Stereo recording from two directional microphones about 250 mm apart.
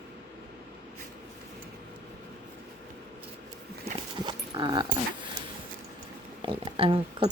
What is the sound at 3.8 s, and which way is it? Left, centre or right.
Dog, centre.